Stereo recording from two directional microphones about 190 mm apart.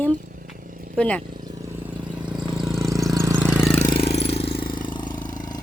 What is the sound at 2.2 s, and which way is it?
Vehicle, 5° right (ahead or behind).